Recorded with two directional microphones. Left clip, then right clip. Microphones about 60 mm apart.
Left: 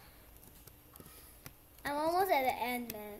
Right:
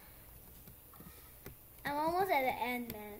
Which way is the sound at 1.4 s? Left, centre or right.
Centre.